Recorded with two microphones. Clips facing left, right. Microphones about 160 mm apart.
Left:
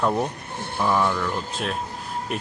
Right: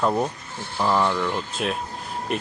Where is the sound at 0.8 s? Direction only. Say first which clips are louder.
Right 1 dB; 5° right (ahead or behind).